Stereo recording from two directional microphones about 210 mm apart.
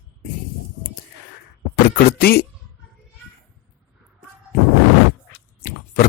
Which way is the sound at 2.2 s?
45° left (ahead or behind).